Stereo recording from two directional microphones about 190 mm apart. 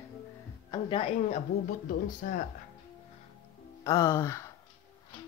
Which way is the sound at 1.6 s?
45° left (ahead or behind).